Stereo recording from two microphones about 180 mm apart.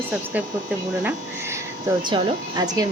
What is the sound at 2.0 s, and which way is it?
Speech, 25° right (ahead or behind).